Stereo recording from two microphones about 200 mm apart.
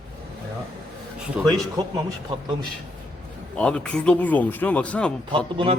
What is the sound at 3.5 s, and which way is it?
Speech, 5° left (ahead or behind).